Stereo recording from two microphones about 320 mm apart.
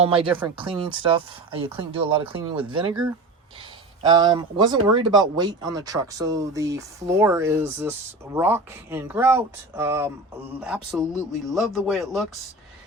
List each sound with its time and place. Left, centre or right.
0.0 s speech: centre
0.3 s speech: centre
0.5 s speech: centre
4.0 s speech: centre